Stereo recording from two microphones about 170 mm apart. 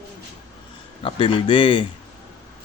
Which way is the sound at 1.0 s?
30° left (ahead or behind).